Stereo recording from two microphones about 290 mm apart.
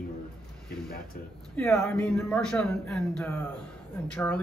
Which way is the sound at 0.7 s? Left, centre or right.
Left.